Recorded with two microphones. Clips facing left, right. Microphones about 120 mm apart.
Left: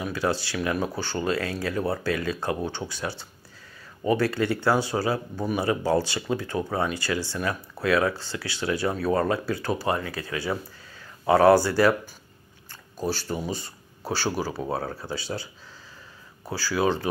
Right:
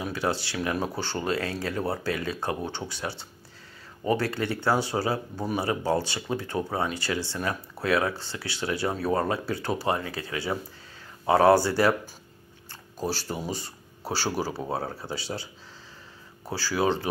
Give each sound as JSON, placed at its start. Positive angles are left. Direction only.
{"t": 0.0, "sound": "speech", "side_deg": -25}
{"t": 13.1, "sound": "speech", "side_deg": -30}
{"t": 16.4, "sound": "speech", "side_deg": -30}